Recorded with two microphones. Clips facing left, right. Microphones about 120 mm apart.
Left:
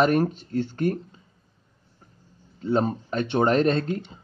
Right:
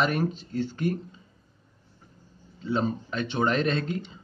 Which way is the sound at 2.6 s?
50° left (ahead or behind).